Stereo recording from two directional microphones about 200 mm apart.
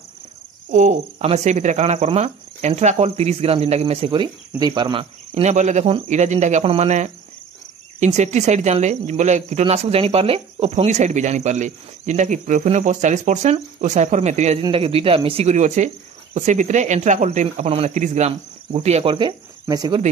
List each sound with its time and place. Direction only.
0.7 s speech: 40° right (ahead or behind); by 20.0 s 20° right (ahead or behind)